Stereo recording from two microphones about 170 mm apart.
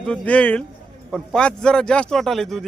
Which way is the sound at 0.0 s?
5° left (ahead or behind).